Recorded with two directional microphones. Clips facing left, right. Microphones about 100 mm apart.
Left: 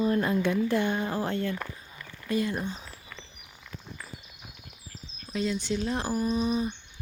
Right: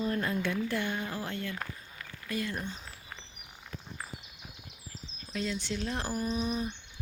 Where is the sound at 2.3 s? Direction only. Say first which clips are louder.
Left 6 dB; 20° left (ahead or behind).